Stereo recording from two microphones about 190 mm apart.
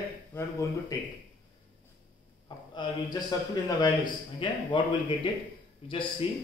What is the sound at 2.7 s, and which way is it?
A man's voice, 20° left (ahead or behind).